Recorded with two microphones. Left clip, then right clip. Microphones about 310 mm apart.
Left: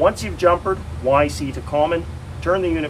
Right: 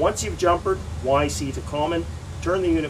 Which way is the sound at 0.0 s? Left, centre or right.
Centre.